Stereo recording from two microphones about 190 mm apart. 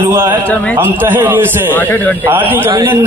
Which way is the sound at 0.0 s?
10° right (ahead or behind).